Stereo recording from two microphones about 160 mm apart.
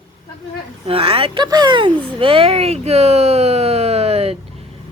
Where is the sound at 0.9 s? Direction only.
35° right (ahead or behind).